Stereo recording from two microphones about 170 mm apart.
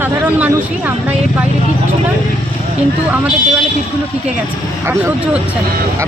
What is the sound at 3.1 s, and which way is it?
Speech, 10° right (ahead or behind).